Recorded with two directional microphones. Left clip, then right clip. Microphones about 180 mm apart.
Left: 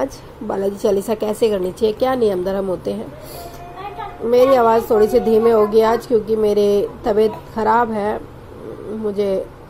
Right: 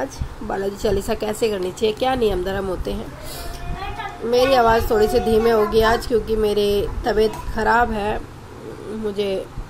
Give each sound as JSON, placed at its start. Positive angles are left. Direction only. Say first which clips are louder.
{"t": 0.6, "sound": "a woman's voice", "louder": "left 4 dB", "side_deg": 15}
{"t": 4.3, "sound": "a woman's voice", "louder": "left 3 dB", "side_deg": 15}